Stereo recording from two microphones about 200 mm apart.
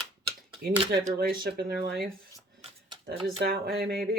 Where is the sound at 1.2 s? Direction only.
50° right (ahead or behind).